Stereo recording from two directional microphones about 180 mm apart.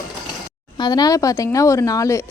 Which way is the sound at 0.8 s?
20° left (ahead or behind).